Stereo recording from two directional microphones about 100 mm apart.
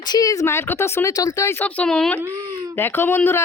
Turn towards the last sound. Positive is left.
turn(degrees=25)  # may be behind; listen again after turning